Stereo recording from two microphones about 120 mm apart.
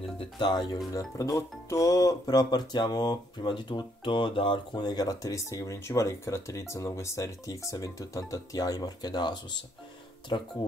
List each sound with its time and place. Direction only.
0.4 s speech: 35° left (ahead or behind)